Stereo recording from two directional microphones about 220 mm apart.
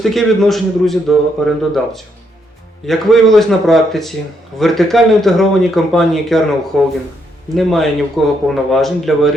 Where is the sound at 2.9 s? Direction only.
Centre (ahead or behind).